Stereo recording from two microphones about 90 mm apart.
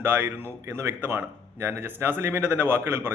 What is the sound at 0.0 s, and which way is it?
A man's voice, 25° right (ahead or behind).